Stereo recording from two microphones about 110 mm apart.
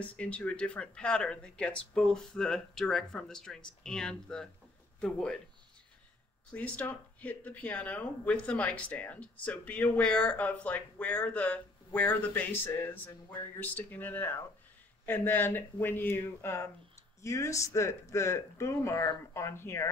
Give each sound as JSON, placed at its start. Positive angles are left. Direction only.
{"t": 0.0, "sound": "speech", "side_deg": 10}
{"t": 6.5, "sound": "speech", "side_deg": 10}